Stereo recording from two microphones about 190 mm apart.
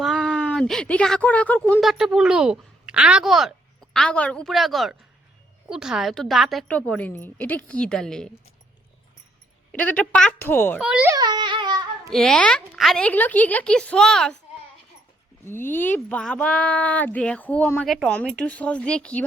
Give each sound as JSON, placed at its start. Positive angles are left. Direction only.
{"t": 0.0, "sound": "speech", "side_deg": 0}
{"t": 1.8, "sound": "a woman's voice", "side_deg": 0}
{"t": 9.7, "sound": "speech", "side_deg": 10}
{"t": 10.8, "sound": "a woman's voice", "side_deg": -5}
{"t": 11.1, "sound": "a sound", "side_deg": -20}
{"t": 12.1, "sound": "a woman's voice", "side_deg": 5}
{"t": 15.4, "sound": "speech", "side_deg": 10}